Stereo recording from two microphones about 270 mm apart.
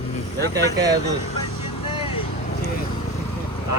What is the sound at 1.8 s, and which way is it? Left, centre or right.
Vehicle, centre.